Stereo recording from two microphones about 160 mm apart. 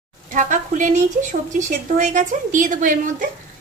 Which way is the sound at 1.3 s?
50° right (ahead or behind).